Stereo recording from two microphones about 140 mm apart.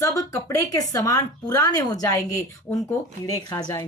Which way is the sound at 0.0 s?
25° left (ahead or behind).